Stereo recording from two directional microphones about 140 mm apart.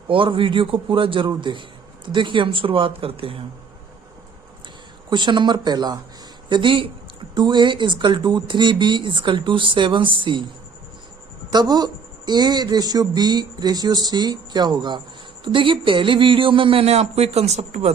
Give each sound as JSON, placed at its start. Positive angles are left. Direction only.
{"t": 0.1, "sound": "speech", "side_deg": -40}
{"t": 5.0, "sound": "speech", "side_deg": -35}
{"t": 11.5, "sound": "speech", "side_deg": -30}